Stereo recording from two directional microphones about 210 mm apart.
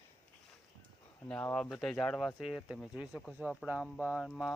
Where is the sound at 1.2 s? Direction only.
5° left (ahead or behind).